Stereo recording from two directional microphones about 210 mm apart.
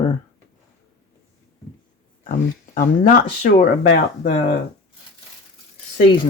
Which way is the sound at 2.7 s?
40° left (ahead or behind).